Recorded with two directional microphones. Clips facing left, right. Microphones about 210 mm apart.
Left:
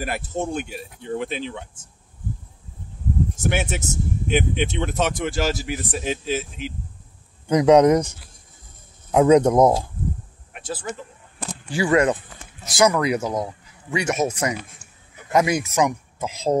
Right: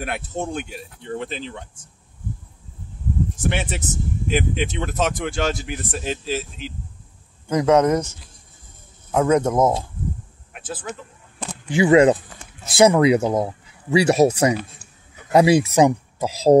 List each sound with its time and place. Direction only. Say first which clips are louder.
0.0 s speech: left 1 dB; centre (ahead or behind)
3.4 s speech: left 1 dB; centre (ahead or behind)
7.4 s speech: left 3 dB; 15° left (ahead or behind)
9.1 s speech: left 3 dB; 15° left (ahead or behind)
10.5 s speech: left 1 dB; centre (ahead or behind)
11.7 s speech: right 5 dB; 20° right (ahead or behind); by 16.5 s 35° right (ahead or behind)